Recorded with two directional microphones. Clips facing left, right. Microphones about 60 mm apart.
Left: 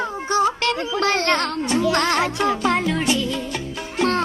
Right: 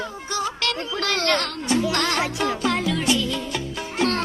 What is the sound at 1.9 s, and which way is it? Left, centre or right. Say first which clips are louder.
Music: left 4 dB; left.